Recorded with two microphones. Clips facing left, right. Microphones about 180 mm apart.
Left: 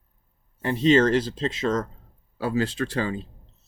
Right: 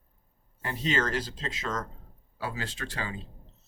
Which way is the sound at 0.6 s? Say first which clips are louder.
Left 11 dB; 30° left (ahead or behind).